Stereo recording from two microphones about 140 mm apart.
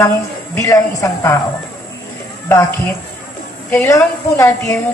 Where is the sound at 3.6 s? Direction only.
15° left (ahead or behind).